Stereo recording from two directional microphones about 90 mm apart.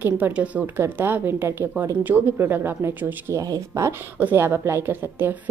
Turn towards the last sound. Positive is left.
turn(degrees=-30)  # may be behind; listen again after turning